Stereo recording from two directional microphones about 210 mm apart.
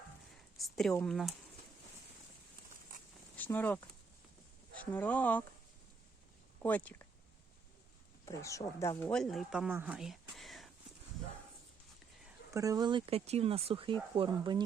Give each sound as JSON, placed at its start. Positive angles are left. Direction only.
{"t": 0.6, "sound": "speech", "side_deg": 0}
{"t": 3.3, "sound": "speech", "side_deg": 10}
{"t": 4.8, "sound": "speech", "side_deg": 5}
{"t": 6.6, "sound": "speech", "side_deg": 5}
{"t": 8.2, "sound": "speech", "side_deg": 15}
{"t": 12.5, "sound": "speech", "side_deg": -15}